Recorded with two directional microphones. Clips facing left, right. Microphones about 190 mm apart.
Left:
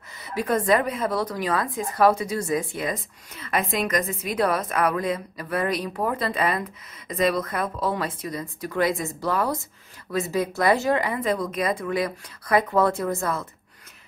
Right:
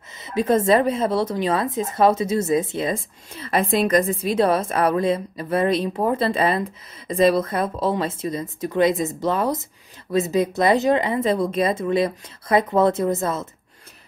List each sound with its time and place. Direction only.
0.2 s a woman's voice: 25° right (ahead or behind)